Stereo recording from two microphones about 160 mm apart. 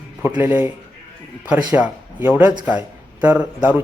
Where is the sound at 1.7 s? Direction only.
10° right (ahead or behind).